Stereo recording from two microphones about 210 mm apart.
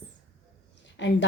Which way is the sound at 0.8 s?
60° left (ahead or behind).